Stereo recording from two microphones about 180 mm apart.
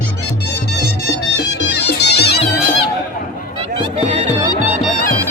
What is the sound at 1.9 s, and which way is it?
Music, 70° left (ahead or behind).